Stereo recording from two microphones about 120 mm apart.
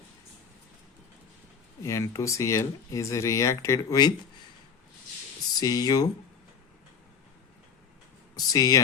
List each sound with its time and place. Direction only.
1.8 s speech: 25° left (ahead or behind)
5.5 s speech: 30° left (ahead or behind)
8.4 s speech: 30° left (ahead or behind)